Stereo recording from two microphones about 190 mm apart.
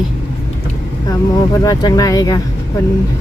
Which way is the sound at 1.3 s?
20° left (ahead or behind).